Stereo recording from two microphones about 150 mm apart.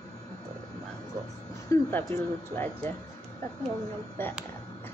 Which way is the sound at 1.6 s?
15° left (ahead or behind).